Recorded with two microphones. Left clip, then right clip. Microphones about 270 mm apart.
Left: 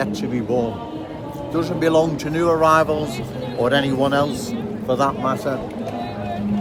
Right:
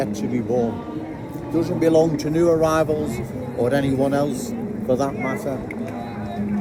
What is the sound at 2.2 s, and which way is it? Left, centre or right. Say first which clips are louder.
Speech: left 1 dB; centre.